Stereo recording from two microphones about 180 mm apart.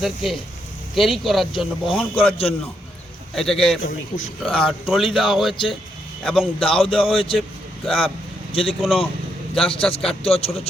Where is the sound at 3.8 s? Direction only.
90° left.